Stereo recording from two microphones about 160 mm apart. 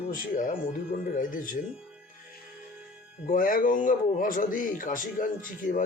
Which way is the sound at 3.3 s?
60° left (ahead or behind).